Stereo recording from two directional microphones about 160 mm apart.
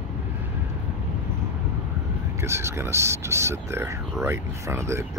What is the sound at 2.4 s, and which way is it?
Speech, 15° right (ahead or behind).